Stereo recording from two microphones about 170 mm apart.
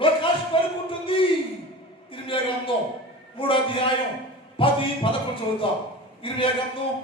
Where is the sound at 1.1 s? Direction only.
30° left (ahead or behind).